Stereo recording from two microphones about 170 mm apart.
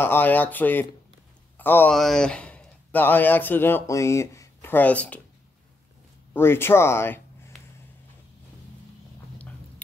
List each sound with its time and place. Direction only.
0.0 s a man's voice: 10° left (ahead or behind)
6.3 s speech: 15° left (ahead or behind)